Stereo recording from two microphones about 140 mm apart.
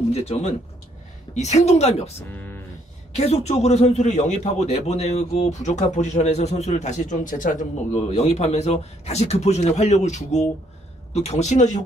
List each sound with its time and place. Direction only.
0.1 s a man's voice: 50° left (ahead or behind)
2.3 s a sound: 15° left (ahead or behind)
3.1 s a man's voice: 50° left (ahead or behind); by 8.0 s 70° left (ahead or behind)
8.1 s a man's voice: 50° left (ahead or behind)